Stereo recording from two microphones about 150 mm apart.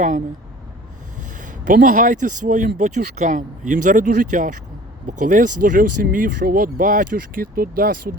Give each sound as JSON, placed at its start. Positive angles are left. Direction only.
{"t": 1.4, "sound": "speech", "side_deg": -60}